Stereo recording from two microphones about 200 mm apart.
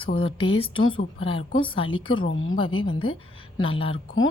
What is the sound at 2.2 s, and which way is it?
Speech, 75° left (ahead or behind).